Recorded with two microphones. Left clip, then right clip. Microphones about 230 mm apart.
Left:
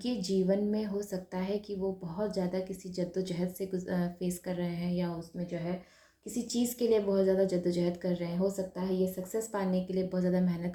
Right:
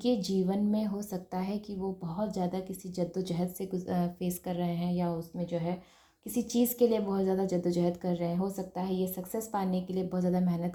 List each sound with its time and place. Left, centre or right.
0.0 s a woman's voice: right
6.7 s a woman's voice: right